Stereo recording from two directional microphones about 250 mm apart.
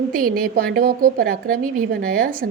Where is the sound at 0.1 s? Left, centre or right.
Right.